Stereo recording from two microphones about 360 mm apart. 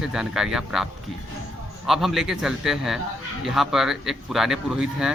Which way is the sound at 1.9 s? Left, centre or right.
Centre.